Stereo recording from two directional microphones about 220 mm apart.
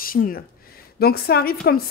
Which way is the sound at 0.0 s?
40° left (ahead or behind).